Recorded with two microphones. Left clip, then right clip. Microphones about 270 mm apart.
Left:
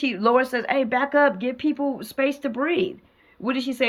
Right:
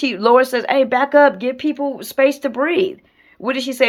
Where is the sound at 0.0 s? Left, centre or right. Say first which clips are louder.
Right 7 dB; right.